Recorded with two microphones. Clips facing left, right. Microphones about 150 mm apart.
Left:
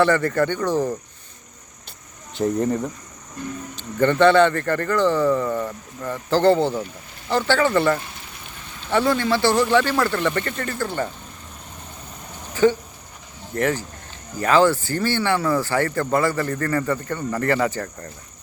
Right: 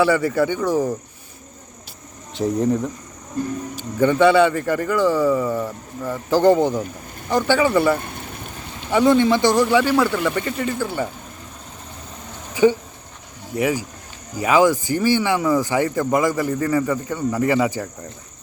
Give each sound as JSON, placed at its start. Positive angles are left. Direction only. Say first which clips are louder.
{"t": 0.0, "sound": "speech", "louder": "right 1 dB", "side_deg": -10}
{"t": 2.3, "sound": "speech", "louder": "right 1 dB", "side_deg": 0}
{"t": 7.9, "sound": "speech", "louder": "right 3 dB", "side_deg": -55}
{"t": 8.9, "sound": "speech", "louder": "right 4 dB", "side_deg": -15}
{"t": 12.6, "sound": "speech", "louder": "right 2 dB", "side_deg": -15}